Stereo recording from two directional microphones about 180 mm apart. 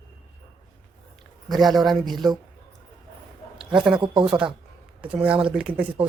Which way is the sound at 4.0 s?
25° right (ahead or behind).